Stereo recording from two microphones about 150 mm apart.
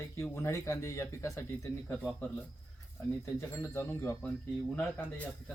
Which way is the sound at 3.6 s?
20° left (ahead or behind).